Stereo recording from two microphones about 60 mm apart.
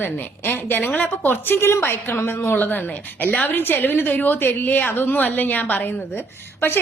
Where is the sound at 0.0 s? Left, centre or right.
Left.